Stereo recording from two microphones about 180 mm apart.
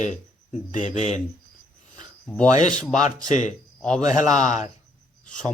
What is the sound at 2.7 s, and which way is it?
Speech, 5° left (ahead or behind).